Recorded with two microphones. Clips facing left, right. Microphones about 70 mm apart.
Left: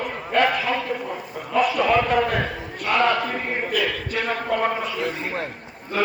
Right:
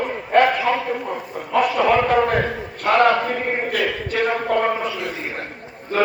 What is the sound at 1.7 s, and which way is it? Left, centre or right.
A man's voice, right.